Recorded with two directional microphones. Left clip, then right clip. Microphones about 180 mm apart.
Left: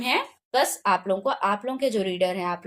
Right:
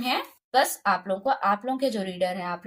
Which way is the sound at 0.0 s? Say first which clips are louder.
Left 3 dB; 20° left (ahead or behind).